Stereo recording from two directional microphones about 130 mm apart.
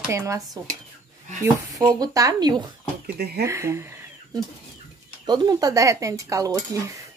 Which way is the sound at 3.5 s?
20° right (ahead or behind).